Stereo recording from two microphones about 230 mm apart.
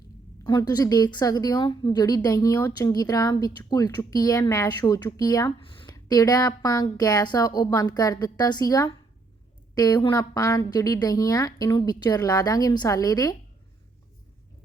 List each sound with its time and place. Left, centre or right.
0.4 s a woman's voice: centre